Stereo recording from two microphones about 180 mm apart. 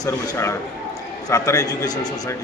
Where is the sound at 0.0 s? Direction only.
15° left (ahead or behind).